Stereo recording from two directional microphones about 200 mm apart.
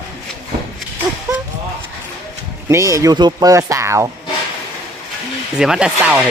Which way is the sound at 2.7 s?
15° right (ahead or behind).